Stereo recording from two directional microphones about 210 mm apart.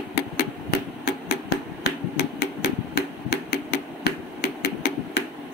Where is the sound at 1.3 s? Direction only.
50° left (ahead or behind).